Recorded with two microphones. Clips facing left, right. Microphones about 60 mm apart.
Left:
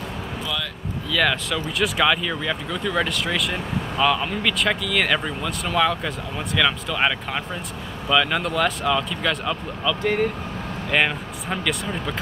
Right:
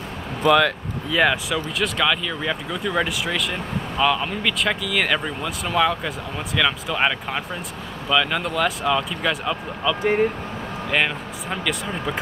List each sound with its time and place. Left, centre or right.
0.4 s speech: right
1.1 s speech: centre
1.8 s speech: centre
2.4 s speech: centre